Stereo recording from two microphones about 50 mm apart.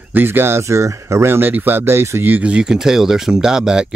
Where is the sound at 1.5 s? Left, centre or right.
Right.